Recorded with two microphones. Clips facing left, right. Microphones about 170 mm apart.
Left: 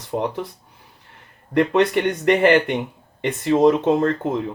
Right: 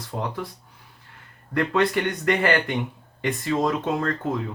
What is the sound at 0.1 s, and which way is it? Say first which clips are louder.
Speech: left 7 dB; 20° left (ahead or behind).